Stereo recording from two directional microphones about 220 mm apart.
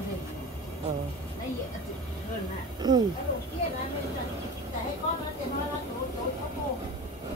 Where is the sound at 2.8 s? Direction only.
20° right (ahead or behind).